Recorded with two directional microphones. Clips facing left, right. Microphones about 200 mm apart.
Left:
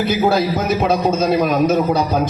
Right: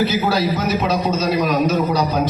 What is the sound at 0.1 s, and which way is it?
A man's voice, 50° left (ahead or behind).